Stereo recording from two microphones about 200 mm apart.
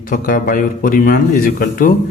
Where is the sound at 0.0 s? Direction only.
45° left (ahead or behind).